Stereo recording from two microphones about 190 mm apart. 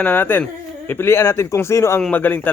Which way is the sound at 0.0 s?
10° left (ahead or behind).